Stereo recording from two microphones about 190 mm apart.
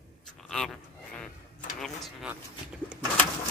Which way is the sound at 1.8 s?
Centre (ahead or behind).